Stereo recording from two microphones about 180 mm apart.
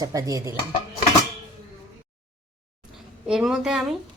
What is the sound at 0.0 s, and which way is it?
Speech, 20° right (ahead or behind).